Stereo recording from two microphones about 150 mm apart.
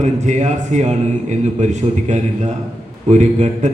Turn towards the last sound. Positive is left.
turn(degrees=-50)  # may be behind; listen again after turning